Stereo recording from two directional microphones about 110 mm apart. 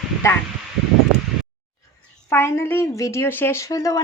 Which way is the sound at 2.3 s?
25° left (ahead or behind).